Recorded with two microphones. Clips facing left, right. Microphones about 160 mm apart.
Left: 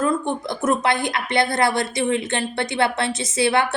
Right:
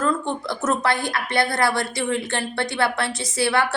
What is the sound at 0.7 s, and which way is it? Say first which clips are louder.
A woman's voice: left 2 dB; 20° left (ahead or behind).